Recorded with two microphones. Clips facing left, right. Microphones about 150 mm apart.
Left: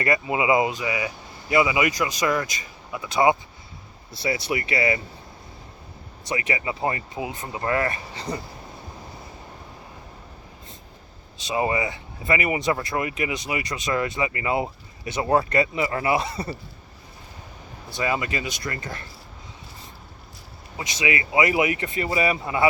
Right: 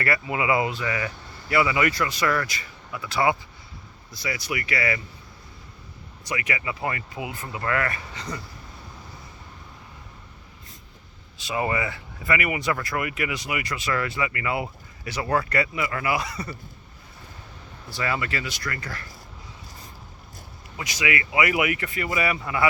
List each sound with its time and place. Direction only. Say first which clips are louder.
0.0 s speech: left 3 dB; 20° left (ahead or behind)
6.2 s speech: left 3 dB; 25° left (ahead or behind)
11.4 s speech: left 2 dB; 20° left (ahead or behind)
17.9 s speech: left 2 dB; 20° left (ahead or behind)
20.7 s speech: left 1 dB; 25° left (ahead or behind)